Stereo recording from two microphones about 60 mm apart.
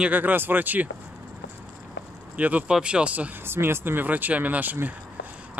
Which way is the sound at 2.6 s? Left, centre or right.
Centre.